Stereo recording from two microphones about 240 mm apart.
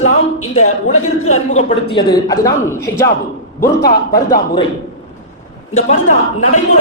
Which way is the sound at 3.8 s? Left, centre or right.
Left.